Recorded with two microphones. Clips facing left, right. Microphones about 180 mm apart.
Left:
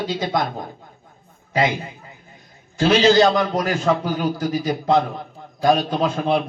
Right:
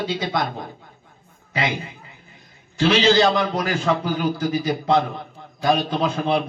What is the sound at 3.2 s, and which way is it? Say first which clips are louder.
A man's voice: left 2 dB; centre (ahead or behind).